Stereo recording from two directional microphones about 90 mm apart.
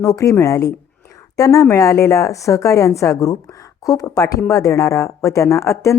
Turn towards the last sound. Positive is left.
turn(degrees=35)  # may be behind; listen again after turning